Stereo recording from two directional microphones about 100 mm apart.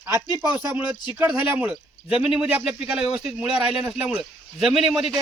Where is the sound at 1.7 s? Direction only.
10° right (ahead or behind).